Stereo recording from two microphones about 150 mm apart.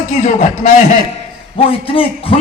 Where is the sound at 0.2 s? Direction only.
55° left (ahead or behind).